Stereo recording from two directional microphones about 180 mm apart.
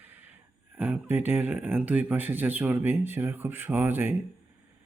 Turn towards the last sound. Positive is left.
turn(degrees=-10)  # may be behind; listen again after turning